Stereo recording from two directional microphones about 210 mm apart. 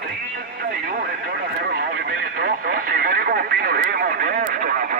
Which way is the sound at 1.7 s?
50° right (ahead or behind).